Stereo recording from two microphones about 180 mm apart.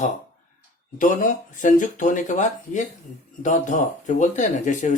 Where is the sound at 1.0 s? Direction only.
45° left (ahead or behind).